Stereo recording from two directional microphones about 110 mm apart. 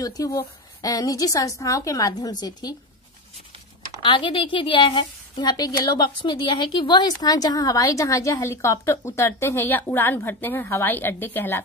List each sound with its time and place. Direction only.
0.0 s a woman's voice: 30° left (ahead or behind)
4.0 s a woman's voice: 50° left (ahead or behind); by 11.6 s 20° left (ahead or behind)